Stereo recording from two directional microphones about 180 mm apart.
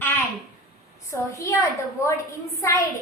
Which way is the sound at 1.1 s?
15° left (ahead or behind).